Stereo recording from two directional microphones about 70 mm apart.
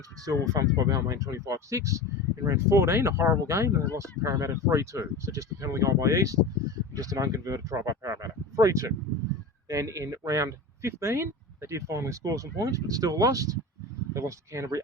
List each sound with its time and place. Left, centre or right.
0.3 s speech: right